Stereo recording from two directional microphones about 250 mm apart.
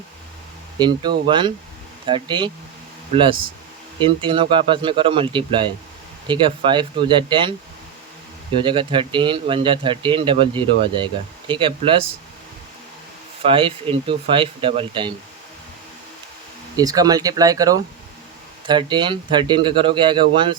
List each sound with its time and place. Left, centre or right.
0.8 s speech: centre
4.0 s speech: centre
8.6 s speech: centre
13.4 s speech: right
16.7 s speech: centre